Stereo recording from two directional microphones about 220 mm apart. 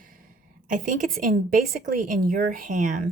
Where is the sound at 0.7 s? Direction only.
35° right (ahead or behind).